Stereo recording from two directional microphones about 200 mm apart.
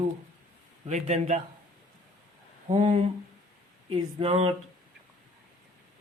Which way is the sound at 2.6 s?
25° right (ahead or behind).